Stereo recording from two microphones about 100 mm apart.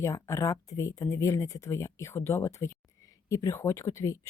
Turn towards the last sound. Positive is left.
turn(degrees=30)  # may be behind; listen again after turning